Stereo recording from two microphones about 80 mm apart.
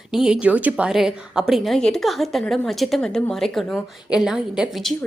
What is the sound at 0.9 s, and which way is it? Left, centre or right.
A woman's voice, centre.